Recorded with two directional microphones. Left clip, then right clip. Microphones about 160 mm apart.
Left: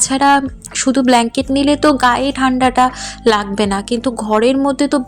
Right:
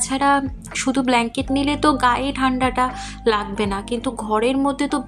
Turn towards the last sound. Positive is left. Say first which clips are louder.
# left 6 dB
turn(degrees=30)  # may be behind; listen again after turning